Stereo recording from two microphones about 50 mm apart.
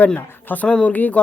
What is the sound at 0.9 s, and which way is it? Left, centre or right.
Speech, left.